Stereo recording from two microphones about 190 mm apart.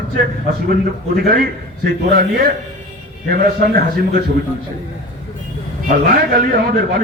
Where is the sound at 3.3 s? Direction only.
55° right (ahead or behind).